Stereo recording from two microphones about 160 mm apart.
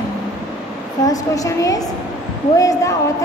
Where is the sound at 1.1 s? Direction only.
20° left (ahead or behind).